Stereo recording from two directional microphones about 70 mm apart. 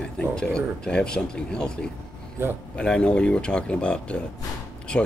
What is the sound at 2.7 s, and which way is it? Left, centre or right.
Speech, centre.